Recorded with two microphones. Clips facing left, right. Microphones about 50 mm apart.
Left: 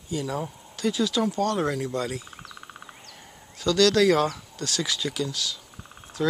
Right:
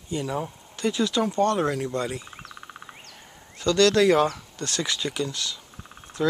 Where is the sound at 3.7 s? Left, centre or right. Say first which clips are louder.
Right 1 dB; right.